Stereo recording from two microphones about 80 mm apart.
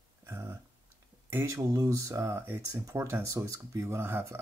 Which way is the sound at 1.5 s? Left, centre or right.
Right.